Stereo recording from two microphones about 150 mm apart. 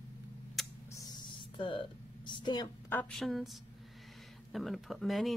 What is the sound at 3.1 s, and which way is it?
Speech, centre (ahead or behind).